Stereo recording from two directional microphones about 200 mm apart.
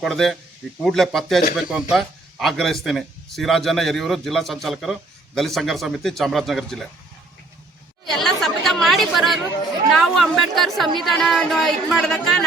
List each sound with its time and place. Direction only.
0.0 s speech: centre (ahead or behind)
8.1 s speech: centre (ahead or behind)